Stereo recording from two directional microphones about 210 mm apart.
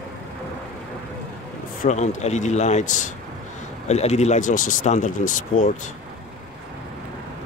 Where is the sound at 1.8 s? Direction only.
35° left (ahead or behind).